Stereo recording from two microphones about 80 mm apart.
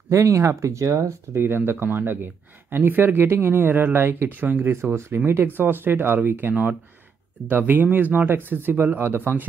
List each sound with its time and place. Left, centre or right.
0.1 s speech: right